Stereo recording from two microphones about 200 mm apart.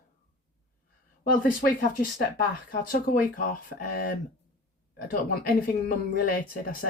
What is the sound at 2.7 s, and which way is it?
Speech, 45° left (ahead or behind).